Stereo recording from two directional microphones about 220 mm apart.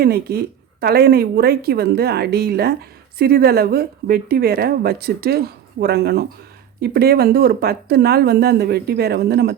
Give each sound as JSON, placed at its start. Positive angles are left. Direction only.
{"t": 0.0, "sound": "speech", "side_deg": -45}